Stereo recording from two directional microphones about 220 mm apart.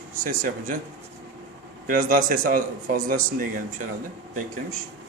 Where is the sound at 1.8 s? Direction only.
40° right (ahead or behind).